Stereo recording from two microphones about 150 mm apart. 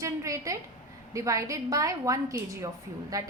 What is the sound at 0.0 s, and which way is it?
A woman's voice, 20° right (ahead or behind).